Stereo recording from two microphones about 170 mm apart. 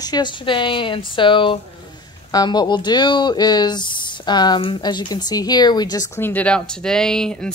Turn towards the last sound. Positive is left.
turn(degrees=5)  # may be behind; listen again after turning